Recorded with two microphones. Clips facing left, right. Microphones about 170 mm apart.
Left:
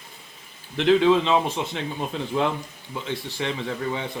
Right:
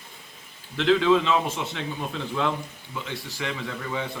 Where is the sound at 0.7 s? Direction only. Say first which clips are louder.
Left 2 dB; 25° left (ahead or behind).